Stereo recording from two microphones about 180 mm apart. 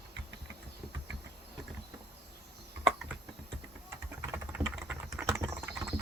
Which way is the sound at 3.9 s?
10° right (ahead or behind).